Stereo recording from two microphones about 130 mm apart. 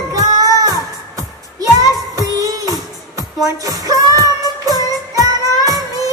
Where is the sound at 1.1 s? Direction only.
25° right (ahead or behind).